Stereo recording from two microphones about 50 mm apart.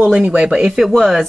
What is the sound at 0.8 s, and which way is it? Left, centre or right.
Speech, centre.